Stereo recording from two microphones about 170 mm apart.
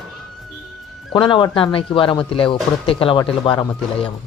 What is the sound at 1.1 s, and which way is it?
Speech, 30° left (ahead or behind).